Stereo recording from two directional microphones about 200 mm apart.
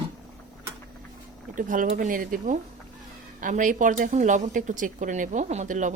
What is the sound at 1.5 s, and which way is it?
Speech, 40° right (ahead or behind).